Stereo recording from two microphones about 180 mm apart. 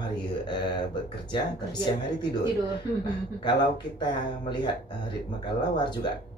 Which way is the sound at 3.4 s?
25° left (ahead or behind).